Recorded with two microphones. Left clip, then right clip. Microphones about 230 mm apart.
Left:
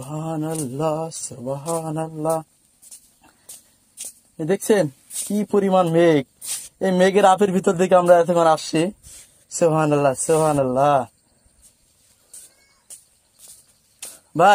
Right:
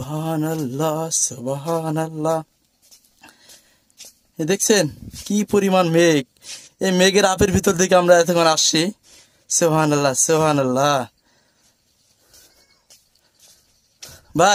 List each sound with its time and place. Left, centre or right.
0.0 s speech: right
4.4 s speech: right
14.1 s a sound: right